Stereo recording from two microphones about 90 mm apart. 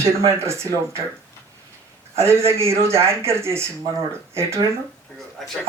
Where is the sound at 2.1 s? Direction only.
30° right (ahead or behind).